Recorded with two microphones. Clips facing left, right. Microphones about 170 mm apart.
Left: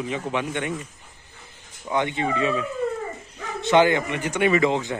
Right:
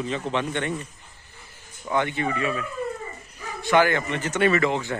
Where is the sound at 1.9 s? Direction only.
20° left (ahead or behind).